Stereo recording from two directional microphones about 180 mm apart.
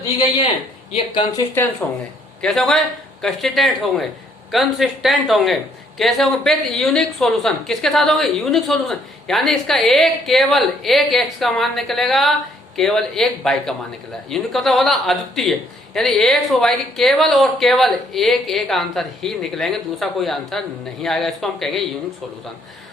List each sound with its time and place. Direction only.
0.9 s speech: 25° left (ahead or behind)
1.8 s a woman's voice: 10° left (ahead or behind)